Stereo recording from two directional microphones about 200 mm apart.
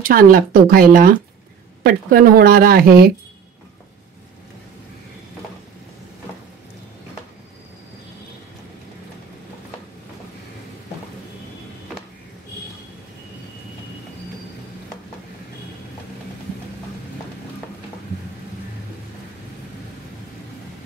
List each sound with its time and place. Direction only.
0.0 s speech: 45° right (ahead or behind)